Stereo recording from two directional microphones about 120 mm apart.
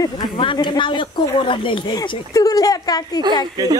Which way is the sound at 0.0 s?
40° left (ahead or behind).